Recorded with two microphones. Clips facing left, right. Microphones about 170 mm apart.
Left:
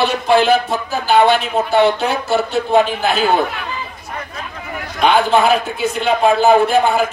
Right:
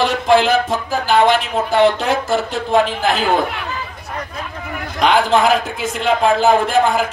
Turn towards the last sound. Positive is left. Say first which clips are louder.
# left 2 dB
turn(degrees=-90)